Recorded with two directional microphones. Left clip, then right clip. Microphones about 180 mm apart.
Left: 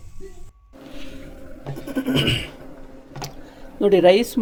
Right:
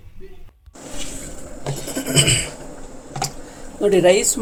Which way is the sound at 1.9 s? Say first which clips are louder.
Right 3 dB; 40° left (ahead or behind).